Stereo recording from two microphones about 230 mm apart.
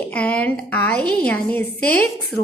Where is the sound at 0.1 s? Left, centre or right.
Centre.